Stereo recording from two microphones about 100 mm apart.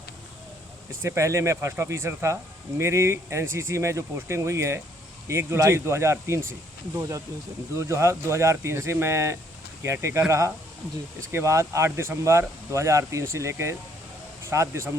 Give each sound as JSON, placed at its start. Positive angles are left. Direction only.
{"t": 1.0, "sound": "speech", "side_deg": -30}